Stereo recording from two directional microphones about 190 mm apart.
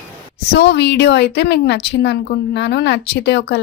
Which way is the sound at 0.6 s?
65° left (ahead or behind).